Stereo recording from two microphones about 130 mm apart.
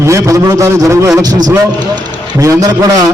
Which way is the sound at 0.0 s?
25° right (ahead or behind).